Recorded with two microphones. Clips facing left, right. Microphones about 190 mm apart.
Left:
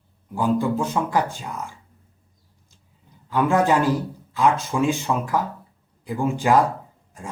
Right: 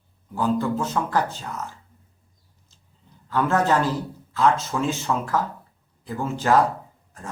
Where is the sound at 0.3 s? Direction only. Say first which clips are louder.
Left 2 dB; 15° left (ahead or behind).